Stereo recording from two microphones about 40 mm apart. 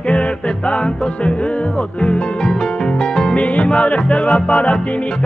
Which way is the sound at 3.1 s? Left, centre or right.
Left.